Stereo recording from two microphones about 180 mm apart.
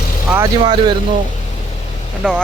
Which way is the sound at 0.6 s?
25° right (ahead or behind).